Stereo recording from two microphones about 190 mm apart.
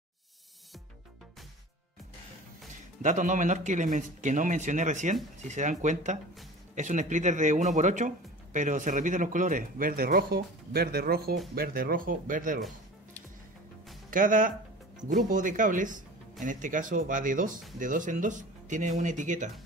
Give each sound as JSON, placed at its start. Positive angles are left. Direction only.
{"t": 2.7, "sound": "speech", "side_deg": -40}
{"t": 14.1, "sound": "speech", "side_deg": -45}